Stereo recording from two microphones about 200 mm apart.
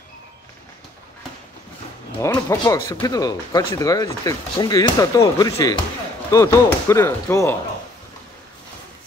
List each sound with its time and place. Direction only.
2.1 s speech: 15° left (ahead or behind)